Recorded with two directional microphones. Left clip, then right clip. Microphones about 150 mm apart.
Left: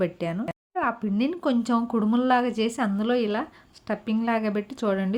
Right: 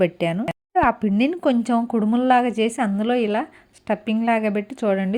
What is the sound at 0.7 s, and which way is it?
A woman's voice, 30° right (ahead or behind).